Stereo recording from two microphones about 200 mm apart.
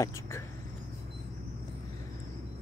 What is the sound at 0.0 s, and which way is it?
Speech, 15° left (ahead or behind).